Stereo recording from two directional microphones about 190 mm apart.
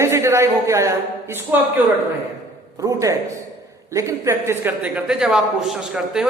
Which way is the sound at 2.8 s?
15° right (ahead or behind).